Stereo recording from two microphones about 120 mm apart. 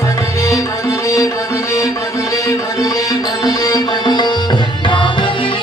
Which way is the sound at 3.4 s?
30° left (ahead or behind).